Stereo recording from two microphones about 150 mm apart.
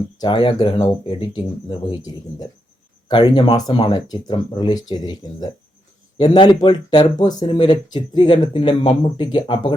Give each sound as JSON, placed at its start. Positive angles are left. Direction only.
{"t": 0.2, "sound": "speech", "side_deg": 35}
{"t": 3.1, "sound": "speech", "side_deg": 30}